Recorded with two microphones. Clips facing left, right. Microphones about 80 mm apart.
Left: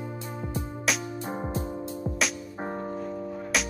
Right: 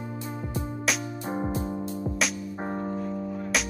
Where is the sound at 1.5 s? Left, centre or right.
Right.